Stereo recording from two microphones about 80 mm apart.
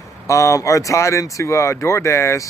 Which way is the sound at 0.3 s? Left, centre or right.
Left.